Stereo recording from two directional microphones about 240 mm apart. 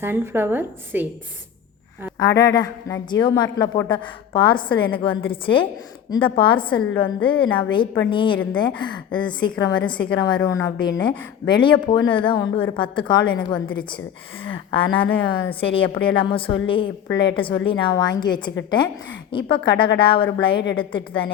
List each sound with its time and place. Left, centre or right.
0.0 s a woman's voice: centre
2.4 s a woman's voice: centre
14.4 s a woman's voice: left